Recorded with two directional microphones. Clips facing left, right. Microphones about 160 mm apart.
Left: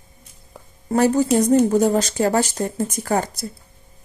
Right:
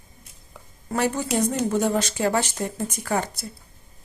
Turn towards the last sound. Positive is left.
turn(degrees=40)  # may be behind; listen again after turning